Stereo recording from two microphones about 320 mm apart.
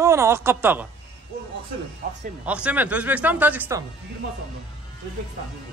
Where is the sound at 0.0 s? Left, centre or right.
Centre.